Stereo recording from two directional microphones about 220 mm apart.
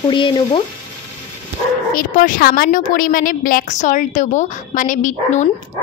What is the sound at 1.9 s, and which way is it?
A woman's voice, 40° left (ahead or behind).